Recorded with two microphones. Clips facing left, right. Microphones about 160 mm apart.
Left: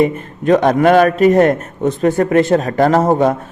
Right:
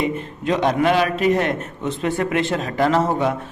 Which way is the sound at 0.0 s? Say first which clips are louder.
Left 8 dB; 50° left (ahead or behind).